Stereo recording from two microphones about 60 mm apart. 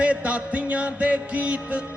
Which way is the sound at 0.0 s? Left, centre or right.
Right.